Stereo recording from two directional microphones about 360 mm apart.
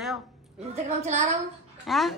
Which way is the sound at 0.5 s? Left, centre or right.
Centre.